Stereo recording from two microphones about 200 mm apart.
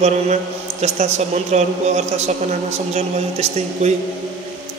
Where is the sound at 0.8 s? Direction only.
35° right (ahead or behind).